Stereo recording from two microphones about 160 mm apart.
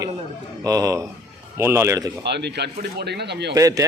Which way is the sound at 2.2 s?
90° right.